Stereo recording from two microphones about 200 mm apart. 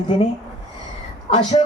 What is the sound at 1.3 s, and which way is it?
Speech, 25° left (ahead or behind).